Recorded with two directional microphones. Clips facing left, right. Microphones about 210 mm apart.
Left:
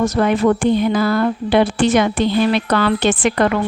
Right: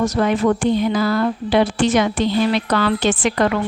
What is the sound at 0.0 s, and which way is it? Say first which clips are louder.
A woman's voice: left 2 dB; 55° left (ahead or behind).